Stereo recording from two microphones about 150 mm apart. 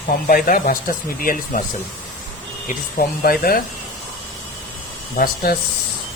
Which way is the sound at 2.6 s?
80° left.